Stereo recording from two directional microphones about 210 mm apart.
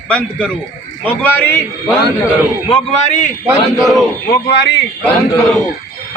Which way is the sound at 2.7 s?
30° left (ahead or behind).